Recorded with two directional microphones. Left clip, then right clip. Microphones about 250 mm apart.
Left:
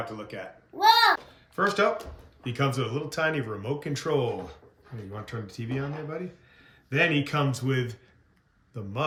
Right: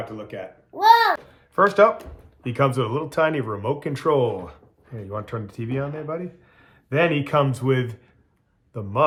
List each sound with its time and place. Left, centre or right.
0.0 s a child's voice: centre